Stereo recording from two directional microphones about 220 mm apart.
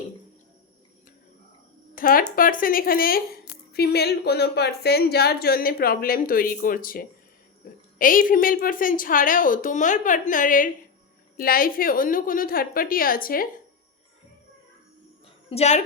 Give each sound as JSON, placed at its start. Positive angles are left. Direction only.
{"t": 2.0, "sound": "a woman's voice", "side_deg": 40}
{"t": 15.4, "sound": "a woman's voice", "side_deg": 30}